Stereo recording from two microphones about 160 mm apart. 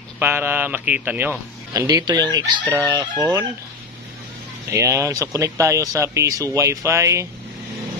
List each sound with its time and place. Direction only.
0.2 s a man's voice: 15° right (ahead or behind)
4.6 s a man's voice: 15° right (ahead or behind)